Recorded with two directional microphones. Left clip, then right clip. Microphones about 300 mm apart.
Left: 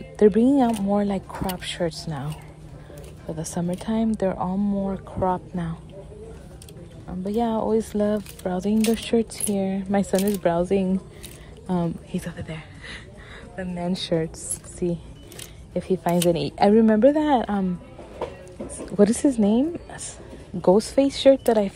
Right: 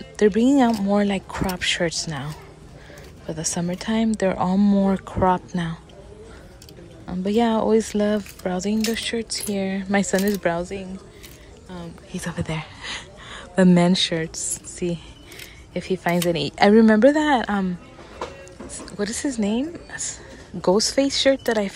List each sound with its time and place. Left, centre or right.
0.0 s speech: centre
7.1 s speech: centre
12.1 s a sound: centre
13.7 s speech: centre
18.9 s a woman's voice: centre